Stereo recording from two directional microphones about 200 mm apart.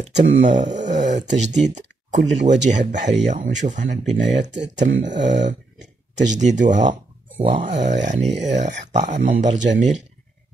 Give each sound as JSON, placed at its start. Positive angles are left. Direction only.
{"t": 0.0, "sound": "speech", "side_deg": -40}
{"t": 0.8, "sound": "a sound", "side_deg": -35}
{"t": 1.2, "sound": "speech", "side_deg": -35}